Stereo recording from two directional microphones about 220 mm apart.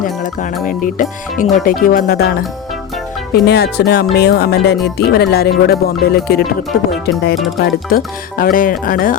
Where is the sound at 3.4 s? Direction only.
50° left (ahead or behind).